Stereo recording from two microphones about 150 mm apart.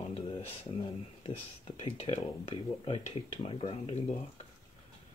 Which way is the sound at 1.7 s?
45° left (ahead or behind).